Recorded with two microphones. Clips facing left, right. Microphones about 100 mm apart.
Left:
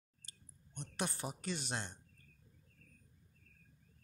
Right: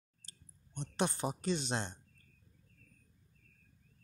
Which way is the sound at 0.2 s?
30° right (ahead or behind).